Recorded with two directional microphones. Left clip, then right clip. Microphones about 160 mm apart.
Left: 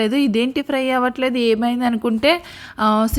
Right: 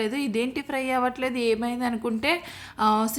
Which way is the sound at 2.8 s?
25° left (ahead or behind).